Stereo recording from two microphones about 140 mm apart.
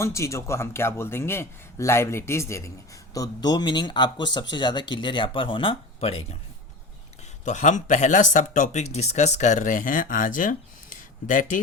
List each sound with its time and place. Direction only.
0.0 s a man's voice: 20° left (ahead or behind); by 6.1 s 45° left (ahead or behind)
7.4 s speech: 60° left (ahead or behind)